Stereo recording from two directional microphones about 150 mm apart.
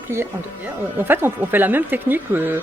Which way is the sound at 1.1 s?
15° right (ahead or behind).